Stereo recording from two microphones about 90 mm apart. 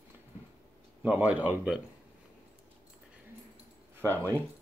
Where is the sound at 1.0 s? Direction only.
15° right (ahead or behind).